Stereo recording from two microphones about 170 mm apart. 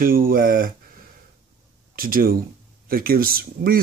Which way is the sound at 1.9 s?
55° right (ahead or behind).